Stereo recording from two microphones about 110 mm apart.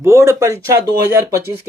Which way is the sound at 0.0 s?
25° right (ahead or behind).